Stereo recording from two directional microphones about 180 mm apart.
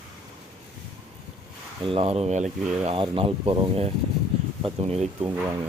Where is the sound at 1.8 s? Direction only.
30° right (ahead or behind).